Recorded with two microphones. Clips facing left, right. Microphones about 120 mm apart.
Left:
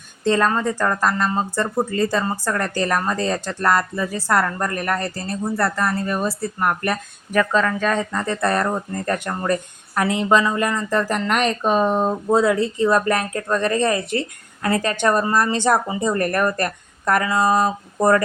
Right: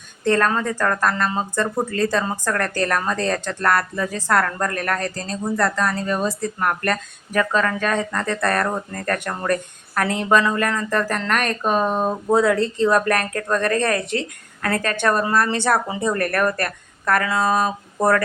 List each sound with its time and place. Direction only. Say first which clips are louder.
0.3 s speech: left 1 dB; 10° left (ahead or behind)
7.9 s speech: even; 15° left (ahead or behind)